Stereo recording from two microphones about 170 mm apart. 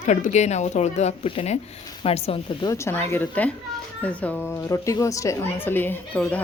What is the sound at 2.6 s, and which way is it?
A woman's voice, 15° left (ahead or behind).